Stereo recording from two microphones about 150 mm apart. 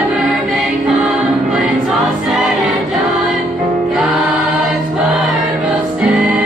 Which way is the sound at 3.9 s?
5° right (ahead or behind).